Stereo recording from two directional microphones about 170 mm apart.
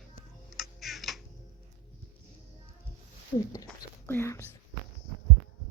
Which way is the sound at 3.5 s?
20° left (ahead or behind).